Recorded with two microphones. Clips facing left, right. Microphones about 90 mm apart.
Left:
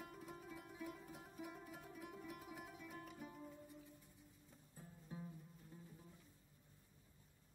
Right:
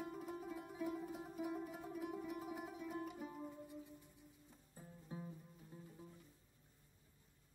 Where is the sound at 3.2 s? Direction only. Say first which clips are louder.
Right 5 dB; 30° right (ahead or behind).